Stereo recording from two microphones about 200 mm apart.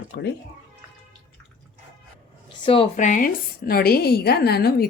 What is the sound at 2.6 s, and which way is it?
A woman's voice, 30° left (ahead or behind).